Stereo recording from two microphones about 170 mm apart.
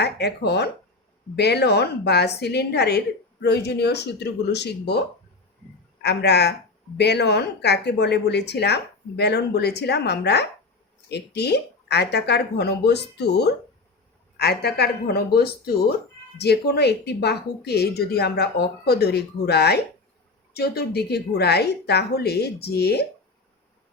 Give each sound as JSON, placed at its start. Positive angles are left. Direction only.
{"t": 0.0, "sound": "speech", "side_deg": 75}